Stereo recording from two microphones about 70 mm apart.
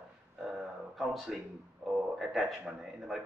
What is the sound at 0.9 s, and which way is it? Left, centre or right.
A man's voice, centre.